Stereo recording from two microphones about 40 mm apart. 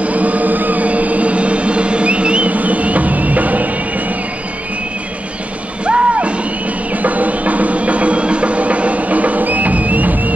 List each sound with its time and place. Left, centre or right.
0.0 s a sound: right
5.9 s music: right
7.0 s music: right